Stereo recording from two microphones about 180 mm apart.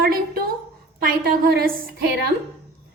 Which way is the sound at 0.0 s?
55° right (ahead or behind).